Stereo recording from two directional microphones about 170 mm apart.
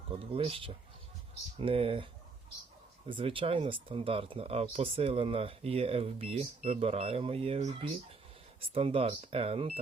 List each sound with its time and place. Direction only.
0.1 s speech: 35° right (ahead or behind)
3.1 s speech: 30° right (ahead or behind)